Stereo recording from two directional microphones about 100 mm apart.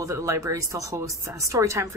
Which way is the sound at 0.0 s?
30° right (ahead or behind).